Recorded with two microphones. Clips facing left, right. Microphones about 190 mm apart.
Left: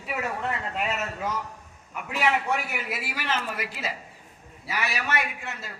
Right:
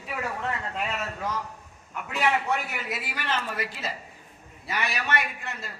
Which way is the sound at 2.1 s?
10° left (ahead or behind).